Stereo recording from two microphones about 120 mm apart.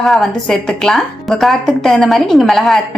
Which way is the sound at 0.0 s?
5° left (ahead or behind).